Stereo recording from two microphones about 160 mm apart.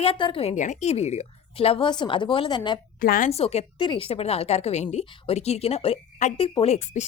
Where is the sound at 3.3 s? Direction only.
40° left (ahead or behind).